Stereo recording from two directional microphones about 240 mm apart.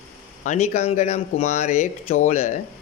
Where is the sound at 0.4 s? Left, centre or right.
Left.